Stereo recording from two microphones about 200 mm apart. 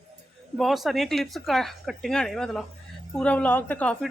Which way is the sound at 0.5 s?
Centre (ahead or behind).